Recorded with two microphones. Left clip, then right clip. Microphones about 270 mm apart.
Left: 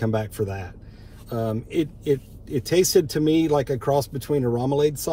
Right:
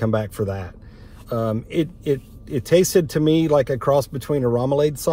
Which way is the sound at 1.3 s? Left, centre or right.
Centre.